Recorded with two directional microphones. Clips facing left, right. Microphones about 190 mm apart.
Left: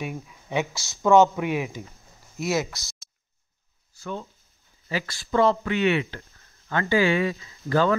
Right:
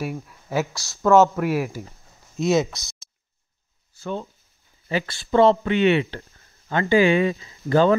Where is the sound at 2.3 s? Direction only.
20° right (ahead or behind).